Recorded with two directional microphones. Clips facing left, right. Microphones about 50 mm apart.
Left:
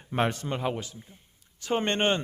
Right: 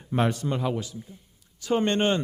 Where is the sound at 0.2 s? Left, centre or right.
Left.